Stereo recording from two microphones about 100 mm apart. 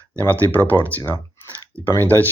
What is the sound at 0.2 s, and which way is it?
Speech, 20° left (ahead or behind).